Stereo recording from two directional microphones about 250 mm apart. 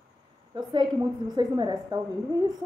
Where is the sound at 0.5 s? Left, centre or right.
Centre.